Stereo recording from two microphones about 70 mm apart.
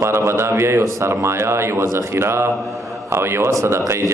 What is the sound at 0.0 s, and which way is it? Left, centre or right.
A man's voice, right.